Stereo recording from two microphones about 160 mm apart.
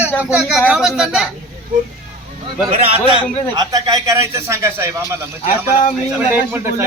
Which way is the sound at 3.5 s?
25° right (ahead or behind).